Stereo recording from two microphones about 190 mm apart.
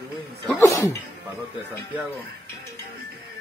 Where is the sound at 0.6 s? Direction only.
15° left (ahead or behind).